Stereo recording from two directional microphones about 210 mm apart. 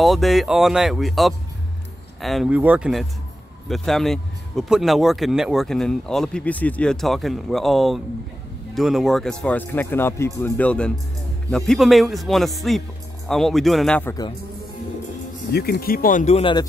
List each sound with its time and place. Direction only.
0.0 s a man's voice: centre (ahead or behind)
15.5 s speech: 50° left (ahead or behind); by 16.6 s 25° left (ahead or behind)